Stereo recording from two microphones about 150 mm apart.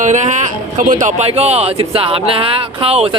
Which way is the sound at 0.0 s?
55° right (ahead or behind).